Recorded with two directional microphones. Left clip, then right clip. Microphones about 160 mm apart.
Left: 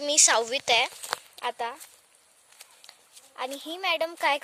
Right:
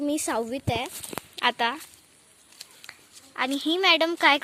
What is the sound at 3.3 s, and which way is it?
Speech, centre (ahead or behind).